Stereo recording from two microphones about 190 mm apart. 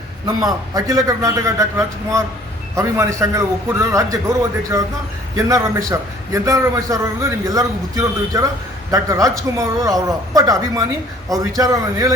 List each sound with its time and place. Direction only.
0.3 s a man's voice: 20° right (ahead or behind)